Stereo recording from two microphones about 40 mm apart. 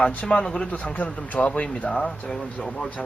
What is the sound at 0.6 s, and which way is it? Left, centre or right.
A man's voice, left.